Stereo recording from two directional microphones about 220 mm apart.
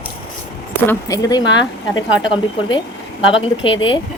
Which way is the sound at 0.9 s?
15° left (ahead or behind).